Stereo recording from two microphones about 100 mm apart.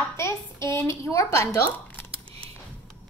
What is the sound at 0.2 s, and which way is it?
Speech, 30° left (ahead or behind).